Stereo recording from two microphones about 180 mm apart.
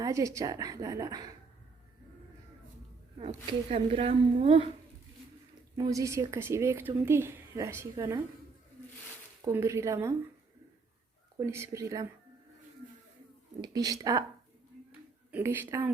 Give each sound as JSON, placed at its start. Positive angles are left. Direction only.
{"t": 0.0, "sound": "a woman's voice", "side_deg": -15}
{"t": 3.2, "sound": "a woman's voice", "side_deg": -30}
{"t": 5.7, "sound": "speech", "side_deg": -20}
{"t": 9.4, "sound": "speech", "side_deg": -15}
{"t": 11.3, "sound": "speech", "side_deg": -15}
{"t": 13.6, "sound": "a woman's voice", "side_deg": -20}
{"t": 15.3, "sound": "speech", "side_deg": -10}